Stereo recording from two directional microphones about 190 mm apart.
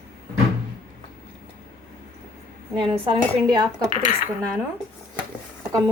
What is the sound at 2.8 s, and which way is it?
Dishes, 25° right (ahead or behind).